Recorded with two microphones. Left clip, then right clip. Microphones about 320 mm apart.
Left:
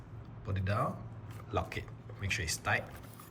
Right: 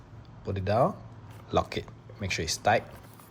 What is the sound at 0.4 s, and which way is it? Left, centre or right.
Speech, centre.